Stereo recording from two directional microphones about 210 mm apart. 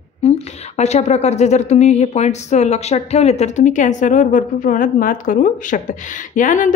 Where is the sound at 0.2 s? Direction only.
30° left (ahead or behind).